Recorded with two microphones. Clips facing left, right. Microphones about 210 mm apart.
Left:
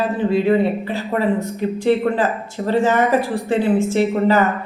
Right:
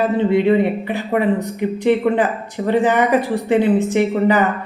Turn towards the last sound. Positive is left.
turn(degrees=-15)  # may be behind; listen again after turning